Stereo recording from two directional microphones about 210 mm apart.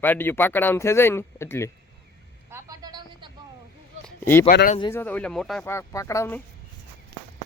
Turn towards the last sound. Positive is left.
turn(degrees=15)  # may be behind; listen again after turning